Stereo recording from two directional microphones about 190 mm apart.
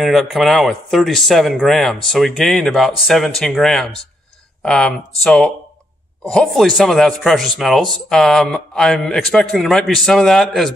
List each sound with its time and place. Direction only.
0.0 s speech: centre (ahead or behind)